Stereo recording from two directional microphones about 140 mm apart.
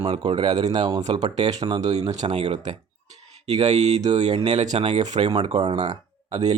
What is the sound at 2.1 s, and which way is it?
Speech, 50° right (ahead or behind).